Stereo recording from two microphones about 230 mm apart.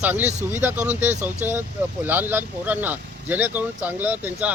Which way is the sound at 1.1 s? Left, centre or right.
Right.